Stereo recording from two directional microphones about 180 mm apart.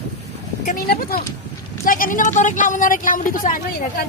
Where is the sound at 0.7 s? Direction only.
55° left (ahead or behind).